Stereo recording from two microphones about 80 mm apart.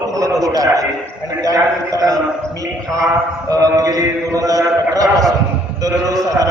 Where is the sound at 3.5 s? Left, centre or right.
Right.